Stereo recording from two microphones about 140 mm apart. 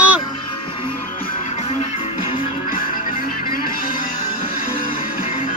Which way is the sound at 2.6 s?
80° left.